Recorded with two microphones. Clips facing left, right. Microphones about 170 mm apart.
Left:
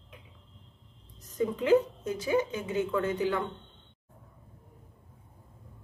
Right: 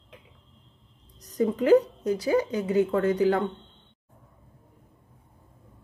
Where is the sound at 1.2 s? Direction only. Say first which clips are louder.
Right 5 dB; 40° right (ahead or behind).